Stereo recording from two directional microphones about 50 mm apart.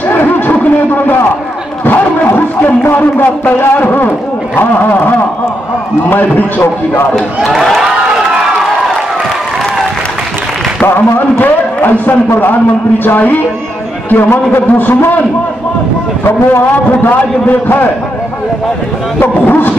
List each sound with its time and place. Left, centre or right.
0.1 s a sound: left
1.9 s a man's voice: left
7.5 s a sound: centre
10.9 s a man's voice: left
16.3 s a man's voice: left
17.1 s a man's voice: left
19.1 s a man's voice: left